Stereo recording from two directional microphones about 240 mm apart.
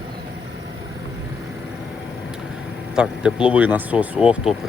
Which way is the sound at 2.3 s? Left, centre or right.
Centre.